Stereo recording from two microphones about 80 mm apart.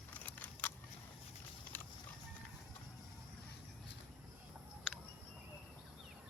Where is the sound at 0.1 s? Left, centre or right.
Centre.